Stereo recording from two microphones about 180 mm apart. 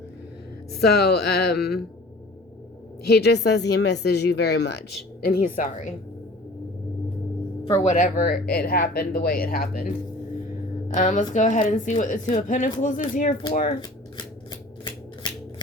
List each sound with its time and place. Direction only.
0.7 s speech: 65° left (ahead or behind)
3.0 s speech: 65° left (ahead or behind)
5.2 s speech: 55° left (ahead or behind)
7.6 s speech: 30° left (ahead or behind)
7.9 s speech: 50° left (ahead or behind)
10.9 s speech: 45° left (ahead or behind)
14.8 s shuffling cards: 25° left (ahead or behind)